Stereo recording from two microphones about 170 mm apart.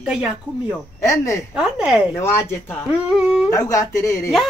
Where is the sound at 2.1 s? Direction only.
15° left (ahead or behind).